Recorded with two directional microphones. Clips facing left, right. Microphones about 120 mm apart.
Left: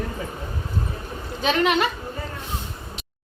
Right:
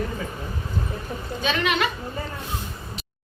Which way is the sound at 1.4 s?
40° left (ahead or behind).